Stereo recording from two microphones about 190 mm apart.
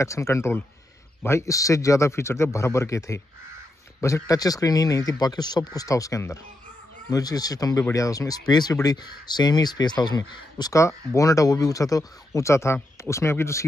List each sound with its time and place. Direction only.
0.0 s speech: 15° left (ahead or behind)